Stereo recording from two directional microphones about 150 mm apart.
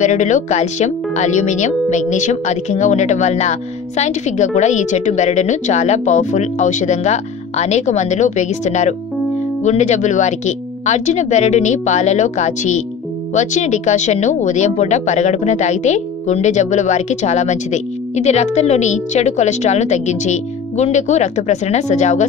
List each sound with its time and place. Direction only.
0.0 s speech: 55° left (ahead or behind)